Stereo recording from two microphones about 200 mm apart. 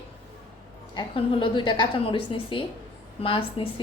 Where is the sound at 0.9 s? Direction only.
25° left (ahead or behind).